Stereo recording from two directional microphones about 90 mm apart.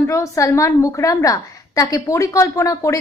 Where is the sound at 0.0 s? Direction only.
35° left (ahead or behind).